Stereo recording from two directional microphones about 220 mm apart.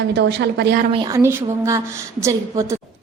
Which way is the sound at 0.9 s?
15° right (ahead or behind).